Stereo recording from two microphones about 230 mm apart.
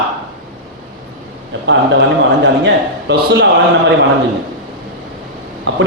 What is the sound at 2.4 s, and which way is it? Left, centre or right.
Speech, right.